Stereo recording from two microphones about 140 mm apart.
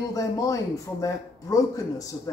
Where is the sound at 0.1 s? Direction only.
25° left (ahead or behind).